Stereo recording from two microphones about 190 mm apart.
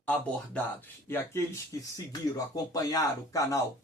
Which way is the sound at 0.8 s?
10° left (ahead or behind).